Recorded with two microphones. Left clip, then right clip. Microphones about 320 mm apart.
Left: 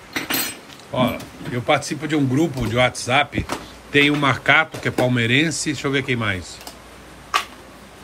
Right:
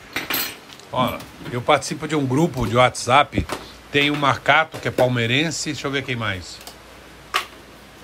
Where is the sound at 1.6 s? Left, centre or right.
Centre.